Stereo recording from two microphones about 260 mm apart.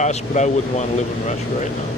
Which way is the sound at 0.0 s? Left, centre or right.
Left.